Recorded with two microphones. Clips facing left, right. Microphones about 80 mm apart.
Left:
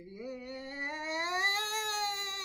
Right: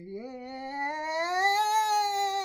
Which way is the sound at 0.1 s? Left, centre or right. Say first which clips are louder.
Right 3 dB; right.